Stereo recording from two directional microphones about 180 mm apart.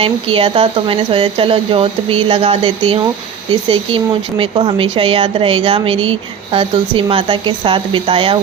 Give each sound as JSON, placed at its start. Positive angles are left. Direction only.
{"t": 0.0, "sound": "speech", "side_deg": -30}